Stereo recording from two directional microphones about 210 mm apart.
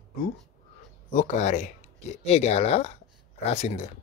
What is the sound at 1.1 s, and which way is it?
Speech, 35° left (ahead or behind).